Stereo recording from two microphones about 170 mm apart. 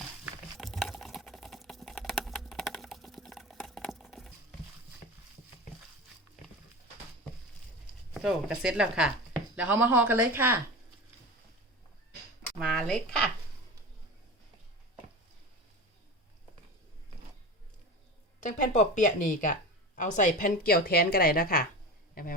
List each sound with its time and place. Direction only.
0.5 s typing: centre (ahead or behind)
8.1 s speech: 5° right (ahead or behind)
12.5 s speech: centre (ahead or behind)
18.4 s a woman's voice: 45° left (ahead or behind)